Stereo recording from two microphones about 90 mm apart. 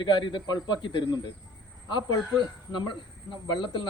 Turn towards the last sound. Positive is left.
turn(degrees=65)  # may be behind; listen again after turning